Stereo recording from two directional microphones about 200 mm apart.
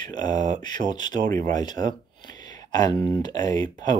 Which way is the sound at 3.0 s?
20° left (ahead or behind).